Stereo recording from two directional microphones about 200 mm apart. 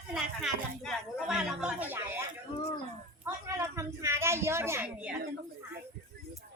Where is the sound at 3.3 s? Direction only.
10° right (ahead or behind).